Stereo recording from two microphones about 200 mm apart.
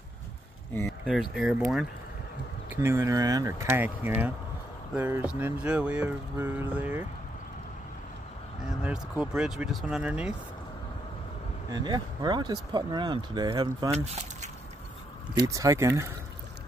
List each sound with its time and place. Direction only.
1.3 s speech: centre (ahead or behind)
2.7 s speech: 10° right (ahead or behind)
8.8 s speech: 5° right (ahead or behind)
11.7 s speech: 20° right (ahead or behind)
13.9 s speech: 35° right (ahead or behind)
15.3 s speech: 20° right (ahead or behind)